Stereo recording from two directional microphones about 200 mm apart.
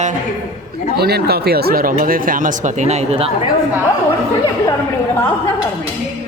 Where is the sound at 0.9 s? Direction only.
50° right (ahead or behind); by 3.3 s 30° right (ahead or behind).